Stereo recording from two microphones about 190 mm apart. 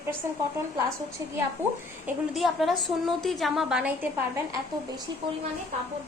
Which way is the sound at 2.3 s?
Centre (ahead or behind).